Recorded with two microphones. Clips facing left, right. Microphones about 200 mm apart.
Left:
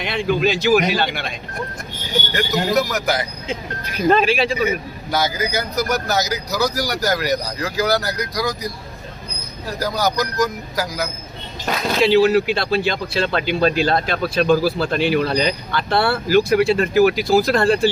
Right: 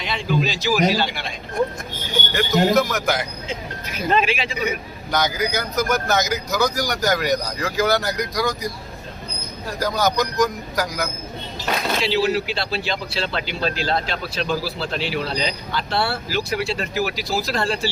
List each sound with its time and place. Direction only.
0.0 s speech: 55° left (ahead or behind)
2.3 s speech: centre (ahead or behind)
4.1 s speech: 40° left (ahead or behind)
5.5 s speech: centre (ahead or behind)
9.8 s speech: 5° left (ahead or behind)
12.0 s speech: 55° left (ahead or behind)